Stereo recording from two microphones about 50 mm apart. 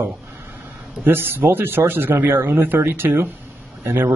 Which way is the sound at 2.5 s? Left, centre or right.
Right.